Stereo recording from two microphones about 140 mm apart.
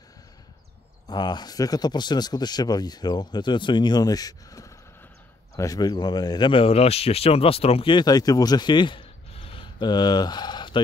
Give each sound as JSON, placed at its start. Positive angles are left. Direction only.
{"t": 1.0, "sound": "speech", "side_deg": 30}